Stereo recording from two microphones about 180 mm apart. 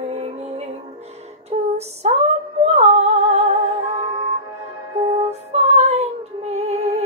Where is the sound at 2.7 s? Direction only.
35° right (ahead or behind).